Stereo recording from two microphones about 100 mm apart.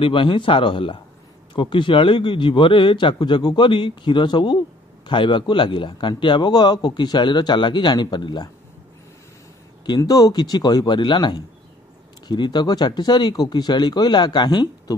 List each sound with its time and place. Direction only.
0.0 s a man's voice: 55° left (ahead or behind)
9.8 s a man's voice: 40° left (ahead or behind)